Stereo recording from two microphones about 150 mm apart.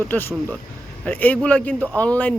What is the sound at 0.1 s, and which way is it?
Speech, 15° left (ahead or behind).